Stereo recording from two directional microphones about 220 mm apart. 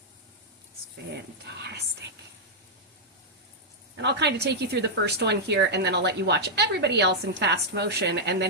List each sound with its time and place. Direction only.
3.9 s a woman's voice: 50° right (ahead or behind)